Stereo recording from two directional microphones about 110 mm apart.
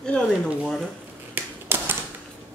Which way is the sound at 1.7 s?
20° right (ahead or behind).